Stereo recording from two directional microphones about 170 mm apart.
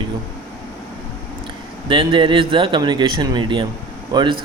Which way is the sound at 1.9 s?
30° right (ahead or behind).